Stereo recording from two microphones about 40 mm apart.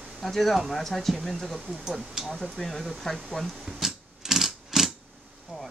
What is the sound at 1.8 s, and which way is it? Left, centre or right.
Speech, centre.